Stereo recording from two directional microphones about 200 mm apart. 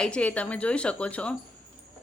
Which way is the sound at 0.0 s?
5° left (ahead or behind).